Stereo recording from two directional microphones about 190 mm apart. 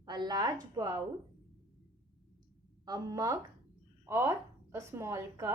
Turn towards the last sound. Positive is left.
turn(degrees=-15)  # may be behind; listen again after turning